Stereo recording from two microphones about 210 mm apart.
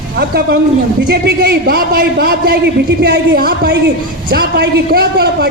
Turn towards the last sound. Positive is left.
turn(degrees=-50)  # may be behind; listen again after turning